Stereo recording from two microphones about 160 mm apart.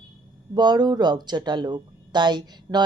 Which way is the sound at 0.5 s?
25° right (ahead or behind).